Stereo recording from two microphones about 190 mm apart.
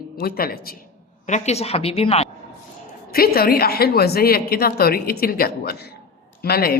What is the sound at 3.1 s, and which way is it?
A woman's voice, 50° left (ahead or behind).